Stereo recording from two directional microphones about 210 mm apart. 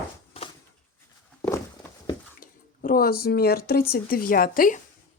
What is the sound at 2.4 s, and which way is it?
Speech, 40° left (ahead or behind).